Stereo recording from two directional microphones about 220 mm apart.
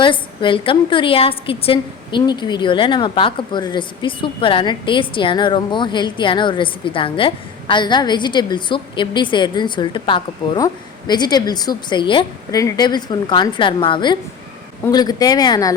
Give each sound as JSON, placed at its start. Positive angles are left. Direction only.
{"t": 0.0, "sound": "a woman's voice", "side_deg": 20}